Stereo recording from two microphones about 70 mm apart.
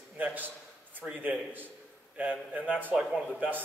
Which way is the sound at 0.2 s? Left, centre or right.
Right.